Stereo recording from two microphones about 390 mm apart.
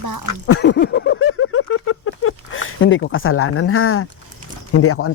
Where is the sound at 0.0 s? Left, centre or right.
Right.